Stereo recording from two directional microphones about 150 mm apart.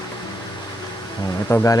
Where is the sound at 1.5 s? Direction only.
20° left (ahead or behind).